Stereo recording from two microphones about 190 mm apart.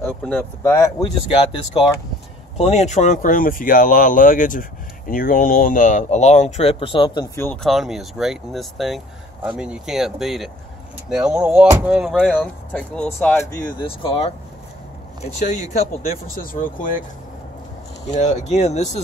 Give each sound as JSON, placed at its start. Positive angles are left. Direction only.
{"t": 0.0, "sound": "speech", "side_deg": 10}
{"t": 7.3, "sound": "speech", "side_deg": 5}
{"t": 12.3, "sound": "speech", "side_deg": 5}
{"t": 13.7, "sound": "speech", "side_deg": 30}
{"t": 15.3, "sound": "speech", "side_deg": 40}
{"t": 18.0, "sound": "speech", "side_deg": 40}